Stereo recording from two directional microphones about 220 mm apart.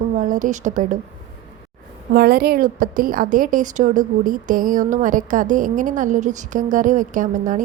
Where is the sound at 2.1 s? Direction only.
45° right (ahead or behind).